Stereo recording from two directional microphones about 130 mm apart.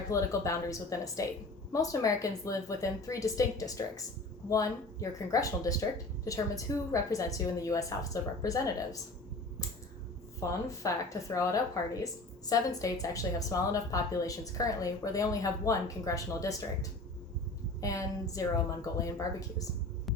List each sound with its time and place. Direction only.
0.1 s a woman's voice: 25° left (ahead or behind)
10.4 s a woman's voice: 25° left (ahead or behind)